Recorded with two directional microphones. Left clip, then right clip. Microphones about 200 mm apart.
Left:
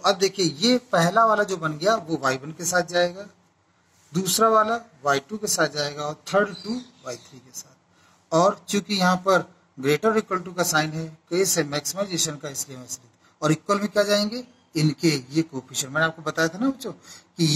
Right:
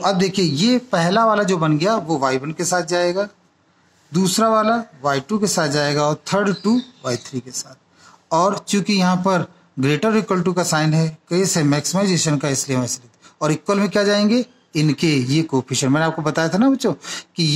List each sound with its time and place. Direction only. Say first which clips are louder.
0.0 s speech: right 3 dB; 45° right (ahead or behind)
8.3 s speech: right 3 dB; 45° right (ahead or behind)